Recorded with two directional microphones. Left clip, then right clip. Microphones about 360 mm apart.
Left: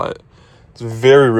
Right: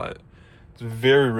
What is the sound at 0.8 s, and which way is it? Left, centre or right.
Speech, left.